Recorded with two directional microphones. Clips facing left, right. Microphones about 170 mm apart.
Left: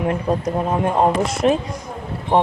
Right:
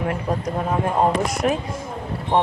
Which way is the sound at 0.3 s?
25° left (ahead or behind).